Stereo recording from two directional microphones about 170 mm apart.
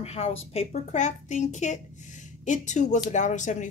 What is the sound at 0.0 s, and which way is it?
Speech, 35° left (ahead or behind).